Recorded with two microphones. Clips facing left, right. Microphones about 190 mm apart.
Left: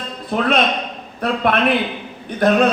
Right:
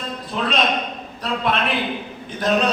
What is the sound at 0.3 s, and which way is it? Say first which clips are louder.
Speech: left 6 dB; 55° left (ahead or behind).